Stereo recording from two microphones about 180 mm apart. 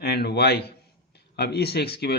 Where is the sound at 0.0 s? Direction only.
60° left (ahead or behind).